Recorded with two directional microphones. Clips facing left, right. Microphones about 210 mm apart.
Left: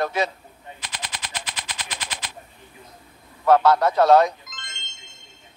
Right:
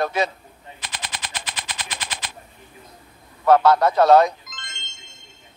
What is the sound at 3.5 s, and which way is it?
Speech, 65° right (ahead or behind).